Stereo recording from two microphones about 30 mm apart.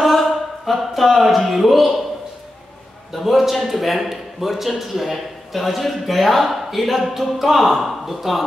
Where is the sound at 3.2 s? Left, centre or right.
Centre.